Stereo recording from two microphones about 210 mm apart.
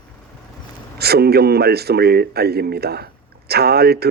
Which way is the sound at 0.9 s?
50° right (ahead or behind).